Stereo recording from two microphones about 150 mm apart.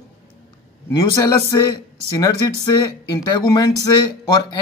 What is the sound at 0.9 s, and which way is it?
Speech, 20° left (ahead or behind).